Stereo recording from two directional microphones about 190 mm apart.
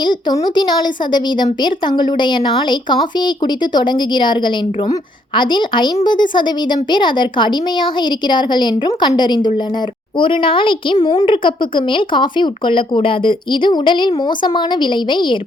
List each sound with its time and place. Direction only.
0.0 s a woman's voice: 20° left (ahead or behind)